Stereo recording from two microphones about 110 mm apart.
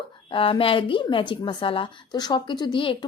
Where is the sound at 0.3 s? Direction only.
55° left (ahead or behind).